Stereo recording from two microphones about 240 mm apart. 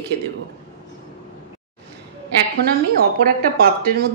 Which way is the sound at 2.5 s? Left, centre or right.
Right.